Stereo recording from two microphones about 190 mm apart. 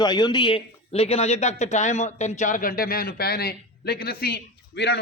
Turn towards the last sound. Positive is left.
turn(degrees=60)  # may be behind; listen again after turning